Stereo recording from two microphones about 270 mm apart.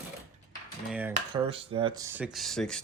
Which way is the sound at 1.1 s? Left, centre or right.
Centre.